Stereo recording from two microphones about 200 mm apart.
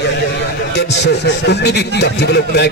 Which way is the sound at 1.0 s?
60° left (ahead or behind).